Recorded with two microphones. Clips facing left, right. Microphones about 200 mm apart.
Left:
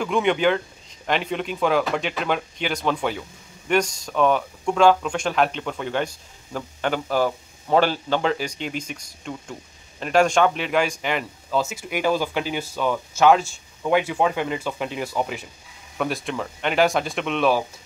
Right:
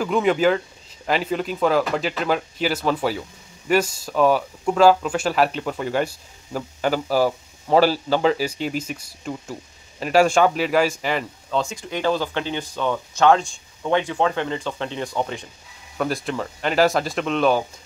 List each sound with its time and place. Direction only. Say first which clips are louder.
0.0 s speech: right 2 dB; centre (ahead or behind)